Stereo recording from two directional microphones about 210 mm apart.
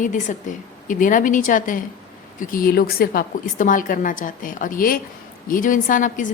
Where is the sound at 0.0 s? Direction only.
35° left (ahead or behind).